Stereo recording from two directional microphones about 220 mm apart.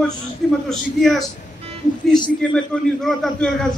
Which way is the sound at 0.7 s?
Centre (ahead or behind).